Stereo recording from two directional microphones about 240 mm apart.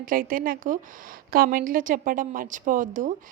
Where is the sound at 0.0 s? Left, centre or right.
Right.